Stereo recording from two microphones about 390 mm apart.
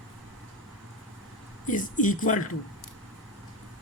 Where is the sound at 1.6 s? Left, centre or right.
Centre.